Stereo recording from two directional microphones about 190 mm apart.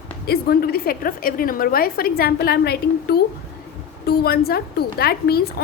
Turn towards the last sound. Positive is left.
turn(degrees=55)  # may be behind; listen again after turning